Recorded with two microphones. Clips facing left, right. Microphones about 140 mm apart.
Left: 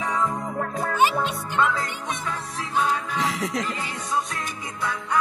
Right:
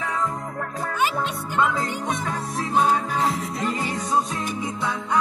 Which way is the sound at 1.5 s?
15° right (ahead or behind).